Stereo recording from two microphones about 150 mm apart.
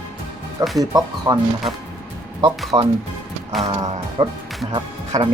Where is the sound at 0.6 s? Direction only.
25° right (ahead or behind).